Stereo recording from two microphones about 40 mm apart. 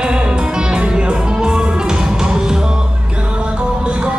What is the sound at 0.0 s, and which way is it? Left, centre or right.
Music, right.